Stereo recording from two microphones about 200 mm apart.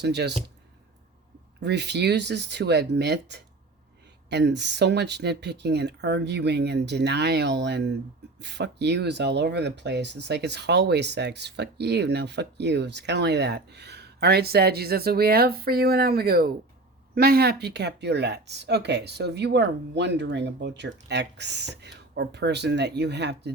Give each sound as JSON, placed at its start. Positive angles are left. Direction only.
{"t": 0.0, "sound": "speech", "side_deg": -55}
{"t": 1.6, "sound": "speech", "side_deg": -55}